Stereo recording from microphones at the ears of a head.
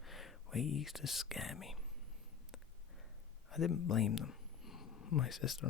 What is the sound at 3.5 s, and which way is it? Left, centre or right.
Speech, left.